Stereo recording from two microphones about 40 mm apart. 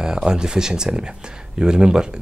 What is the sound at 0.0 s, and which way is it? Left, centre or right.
Speech, centre.